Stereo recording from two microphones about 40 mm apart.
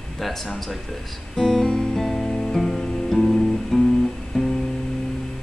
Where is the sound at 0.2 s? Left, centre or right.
Centre.